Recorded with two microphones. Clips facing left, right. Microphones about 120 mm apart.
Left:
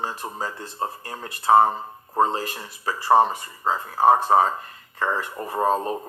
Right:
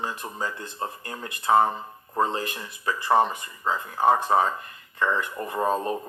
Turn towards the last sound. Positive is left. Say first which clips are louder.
# left 2 dB
turn(degrees=30)  # may be behind; listen again after turning